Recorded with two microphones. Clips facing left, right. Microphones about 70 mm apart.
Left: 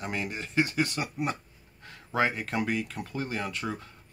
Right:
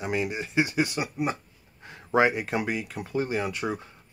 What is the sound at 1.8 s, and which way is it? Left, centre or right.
Speech, centre.